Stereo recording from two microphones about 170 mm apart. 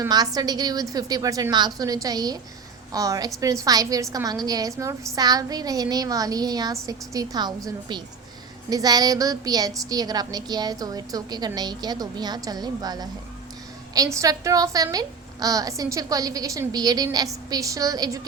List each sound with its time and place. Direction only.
0.0 s a woman's voice: 25° right (ahead or behind)